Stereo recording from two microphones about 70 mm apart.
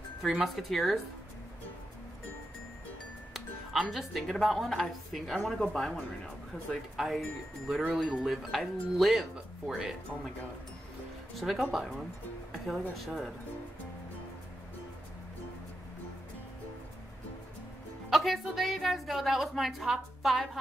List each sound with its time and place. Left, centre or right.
0.2 s a woman's voice: centre
3.9 s a woman's voice: centre
6.7 s a woman's voice: centre
11.3 s a woman's voice: centre
18.1 s a woman's voice: centre